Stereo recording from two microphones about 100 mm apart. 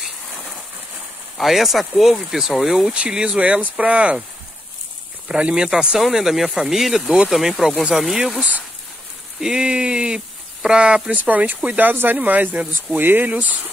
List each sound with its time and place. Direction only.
0.0 s a sound: centre (ahead or behind)
1.4 s speech: centre (ahead or behind)
5.3 s speech: 10° right (ahead or behind)